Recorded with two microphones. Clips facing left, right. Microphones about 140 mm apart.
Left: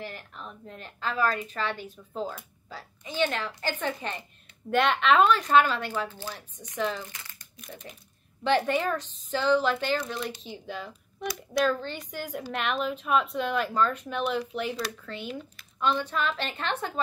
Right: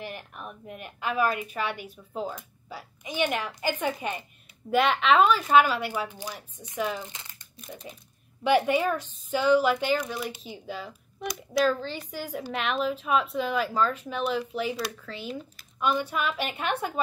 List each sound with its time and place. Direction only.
0.0 s a woman's voice: 15° right (ahead or behind)
8.5 s a woman's voice: 10° right (ahead or behind)